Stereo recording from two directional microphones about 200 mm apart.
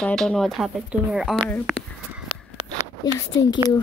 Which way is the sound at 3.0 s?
20° left (ahead or behind).